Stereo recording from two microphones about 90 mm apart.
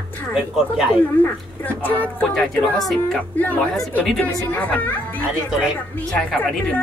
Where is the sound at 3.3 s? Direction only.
20° left (ahead or behind).